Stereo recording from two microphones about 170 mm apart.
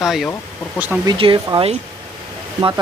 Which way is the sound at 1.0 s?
25° right (ahead or behind).